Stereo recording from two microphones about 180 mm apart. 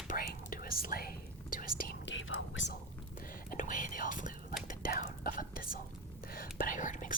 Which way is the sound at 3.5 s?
50° left (ahead or behind).